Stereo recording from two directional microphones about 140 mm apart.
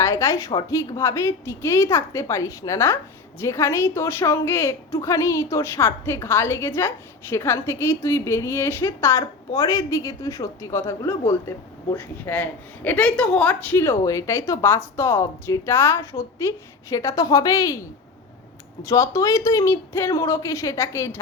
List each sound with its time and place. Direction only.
0.0 s a woman's voice: 20° left (ahead or behind)
18.8 s a woman's voice: 20° left (ahead or behind)